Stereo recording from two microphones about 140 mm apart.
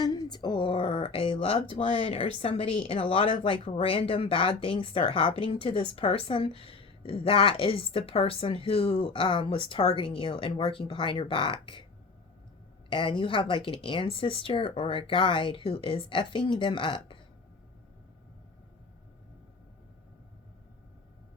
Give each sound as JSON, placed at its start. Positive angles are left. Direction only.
{"t": 0.0, "sound": "speech", "side_deg": 30}
{"t": 12.9, "sound": "speech", "side_deg": 35}